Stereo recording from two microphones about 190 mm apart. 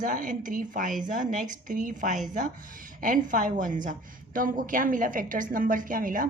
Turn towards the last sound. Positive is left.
turn(degrees=-45)  # may be behind; listen again after turning